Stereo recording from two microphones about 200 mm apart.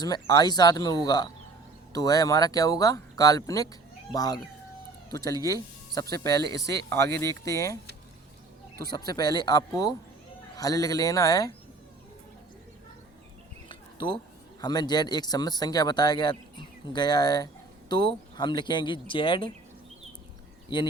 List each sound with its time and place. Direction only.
0.0 s speech: 20° left (ahead or behind)
6.6 s speech: 55° right (ahead or behind)
7.2 s speech: 15° left (ahead or behind)
8.9 s speech: 20° left (ahead or behind)
13.7 s a sound: 25° left (ahead or behind)
14.6 s speech: 20° left (ahead or behind)
20.7 s speech: 20° left (ahead or behind)